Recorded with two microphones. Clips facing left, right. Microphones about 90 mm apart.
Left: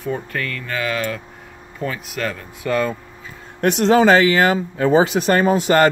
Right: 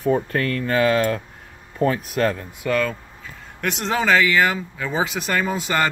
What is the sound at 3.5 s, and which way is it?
Speech, 50° left (ahead or behind).